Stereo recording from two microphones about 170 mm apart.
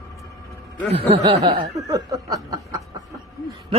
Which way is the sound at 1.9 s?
20° right (ahead or behind).